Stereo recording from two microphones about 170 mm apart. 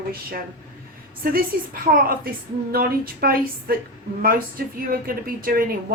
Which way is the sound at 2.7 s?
60° right (ahead or behind).